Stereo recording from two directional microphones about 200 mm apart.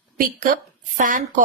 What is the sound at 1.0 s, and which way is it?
Speech, 40° right (ahead or behind).